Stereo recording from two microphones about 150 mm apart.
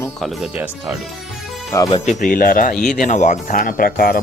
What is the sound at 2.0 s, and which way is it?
Speech, 65° left (ahead or behind).